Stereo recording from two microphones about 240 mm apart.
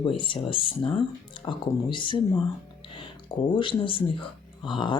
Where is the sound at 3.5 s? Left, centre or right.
Centre.